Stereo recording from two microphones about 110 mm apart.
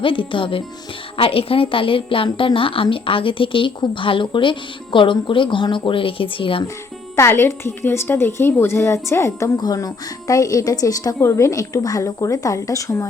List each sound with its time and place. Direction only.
0.0 s a woman's voice: 50° left (ahead or behind)
7.2 s a woman's voice: 20° left (ahead or behind)
9.6 s a woman's voice: 35° left (ahead or behind)